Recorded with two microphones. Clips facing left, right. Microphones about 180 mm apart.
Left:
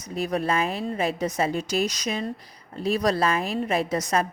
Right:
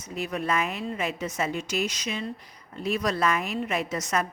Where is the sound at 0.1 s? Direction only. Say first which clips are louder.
Left 3 dB; 35° left (ahead or behind).